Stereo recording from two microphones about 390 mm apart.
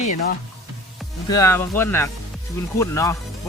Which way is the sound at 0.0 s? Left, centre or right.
Centre.